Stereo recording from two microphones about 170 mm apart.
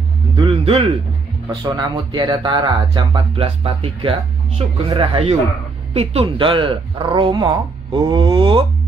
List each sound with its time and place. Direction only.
0.4 s music: 35° right (ahead or behind)
1.5 s speech: 25° right (ahead or behind)